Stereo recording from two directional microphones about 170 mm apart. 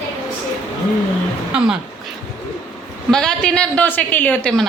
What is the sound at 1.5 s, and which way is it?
Speech, 5° right (ahead or behind).